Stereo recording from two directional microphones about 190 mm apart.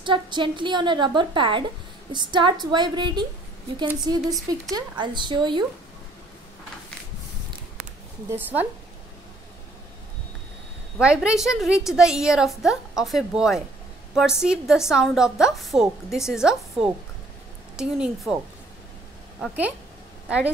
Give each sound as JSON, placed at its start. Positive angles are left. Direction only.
{"t": 0.0, "sound": "a woman's voice", "side_deg": -25}
{"t": 4.2, "sound": "a woman's voice", "side_deg": 0}
{"t": 4.5, "sound": "a woman's voice", "side_deg": -20}
{"t": 8.3, "sound": "a woman's voice", "side_deg": -10}
{"t": 11.0, "sound": "a woman's voice", "side_deg": -5}
{"t": 19.4, "sound": "a woman's voice", "side_deg": -10}